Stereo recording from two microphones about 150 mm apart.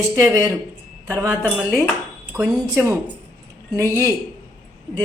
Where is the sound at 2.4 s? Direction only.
5° right (ahead or behind).